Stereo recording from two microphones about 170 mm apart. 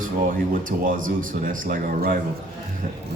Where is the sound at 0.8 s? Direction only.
55° right (ahead or behind).